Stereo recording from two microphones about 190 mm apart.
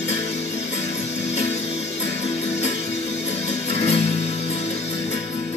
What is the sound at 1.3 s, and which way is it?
Music, 35° left (ahead or behind).